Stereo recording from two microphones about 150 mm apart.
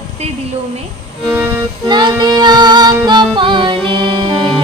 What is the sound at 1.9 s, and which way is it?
Music, 30° right (ahead or behind).